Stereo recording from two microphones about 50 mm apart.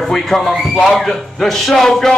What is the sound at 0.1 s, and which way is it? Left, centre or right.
A man's voice, centre.